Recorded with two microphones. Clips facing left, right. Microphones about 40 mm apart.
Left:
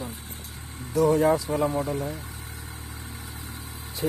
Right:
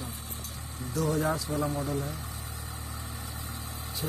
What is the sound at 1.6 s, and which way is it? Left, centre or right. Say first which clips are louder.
Speech: left 6 dB; left.